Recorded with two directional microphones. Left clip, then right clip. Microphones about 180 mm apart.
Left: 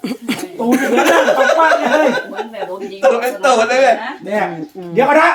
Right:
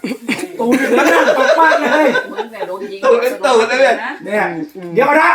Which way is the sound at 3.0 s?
70° left (ahead or behind).